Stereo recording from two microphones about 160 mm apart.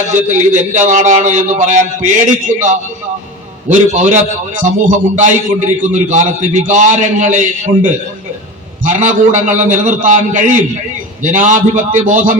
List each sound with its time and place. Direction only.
0.1 s a man's voice: 50° right (ahead or behind)
3.7 s a man's voice: 50° right (ahead or behind)
8.8 s a man's voice: 55° right (ahead or behind)